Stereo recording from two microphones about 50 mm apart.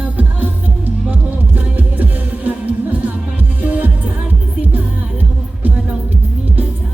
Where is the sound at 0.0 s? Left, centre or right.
Right.